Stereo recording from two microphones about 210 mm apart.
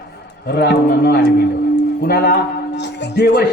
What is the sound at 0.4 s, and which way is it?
A man's voice, 50° left (ahead or behind).